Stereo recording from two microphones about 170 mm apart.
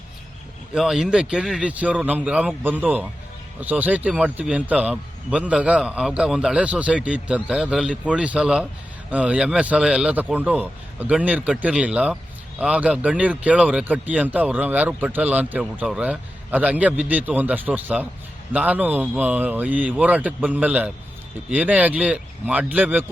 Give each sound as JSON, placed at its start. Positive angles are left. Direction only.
{"t": 0.7, "sound": "speech", "side_deg": 0}